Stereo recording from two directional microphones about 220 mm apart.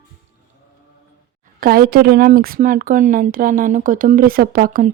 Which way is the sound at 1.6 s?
40° right (ahead or behind).